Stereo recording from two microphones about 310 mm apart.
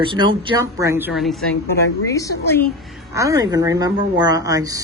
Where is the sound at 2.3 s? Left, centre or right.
Left.